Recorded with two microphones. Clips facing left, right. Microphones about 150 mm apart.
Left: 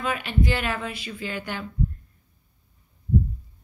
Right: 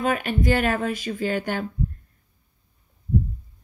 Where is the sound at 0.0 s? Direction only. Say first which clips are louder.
Right 3 dB; 45° right (ahead or behind).